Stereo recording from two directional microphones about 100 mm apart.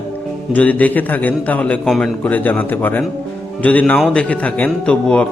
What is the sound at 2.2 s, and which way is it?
Speech, 15° left (ahead or behind).